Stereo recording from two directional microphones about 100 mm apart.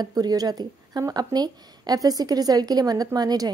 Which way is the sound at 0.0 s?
40° right (ahead or behind).